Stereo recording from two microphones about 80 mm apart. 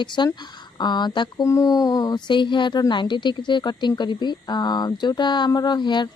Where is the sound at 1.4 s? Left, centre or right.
Left.